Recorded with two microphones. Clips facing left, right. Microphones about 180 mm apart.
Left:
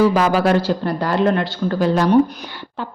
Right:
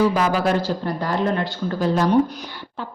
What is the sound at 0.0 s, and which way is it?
Speech, 80° left.